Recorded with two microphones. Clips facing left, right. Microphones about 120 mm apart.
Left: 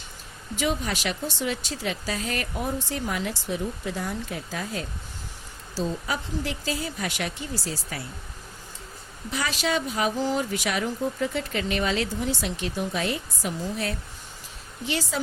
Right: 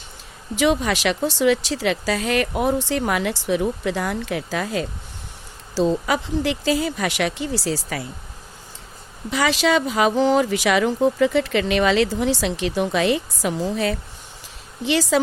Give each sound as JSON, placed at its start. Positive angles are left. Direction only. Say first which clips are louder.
{"t": 0.5, "sound": "speech", "louder": "right 8 dB", "side_deg": -90}
{"t": 9.3, "sound": "speech", "louder": "right 8 dB", "side_deg": -90}